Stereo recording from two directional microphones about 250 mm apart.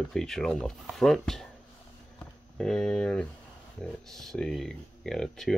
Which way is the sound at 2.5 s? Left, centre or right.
Centre.